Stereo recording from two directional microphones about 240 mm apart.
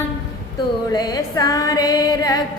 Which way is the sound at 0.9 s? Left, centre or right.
Centre.